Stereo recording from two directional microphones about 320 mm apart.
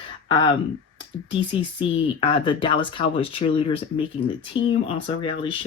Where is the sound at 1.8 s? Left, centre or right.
Centre.